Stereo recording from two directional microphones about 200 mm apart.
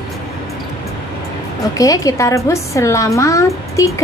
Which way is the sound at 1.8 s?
15° left (ahead or behind).